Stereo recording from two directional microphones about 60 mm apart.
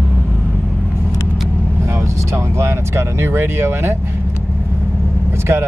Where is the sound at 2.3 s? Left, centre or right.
Right.